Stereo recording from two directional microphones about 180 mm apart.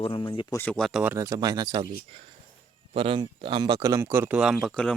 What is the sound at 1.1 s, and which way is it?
Speech, 20° right (ahead or behind).